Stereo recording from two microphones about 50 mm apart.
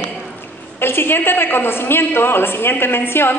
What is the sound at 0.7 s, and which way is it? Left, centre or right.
A woman's voice, left.